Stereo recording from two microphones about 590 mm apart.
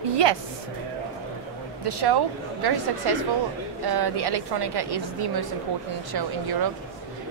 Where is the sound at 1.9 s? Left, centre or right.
Right.